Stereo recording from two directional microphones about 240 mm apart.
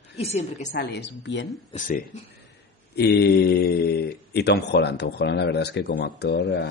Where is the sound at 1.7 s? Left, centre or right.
Left.